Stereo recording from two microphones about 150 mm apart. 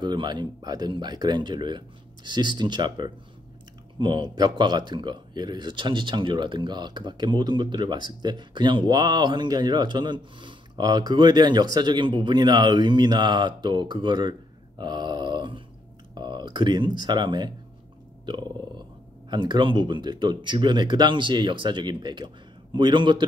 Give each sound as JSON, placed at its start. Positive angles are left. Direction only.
{"t": 0.0, "sound": "speech", "side_deg": -30}
{"t": 19.3, "sound": "speech", "side_deg": -30}